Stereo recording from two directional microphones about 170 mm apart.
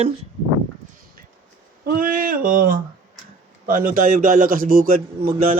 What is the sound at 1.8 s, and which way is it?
Speech, 55° right (ahead or behind).